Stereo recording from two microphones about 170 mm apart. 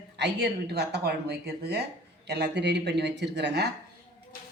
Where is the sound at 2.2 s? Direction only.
85° right.